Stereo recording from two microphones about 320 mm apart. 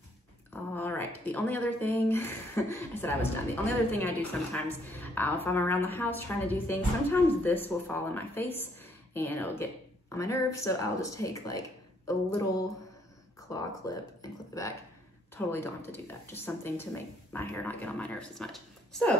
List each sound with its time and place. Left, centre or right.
0.5 s speech: centre
13.5 s speech: centre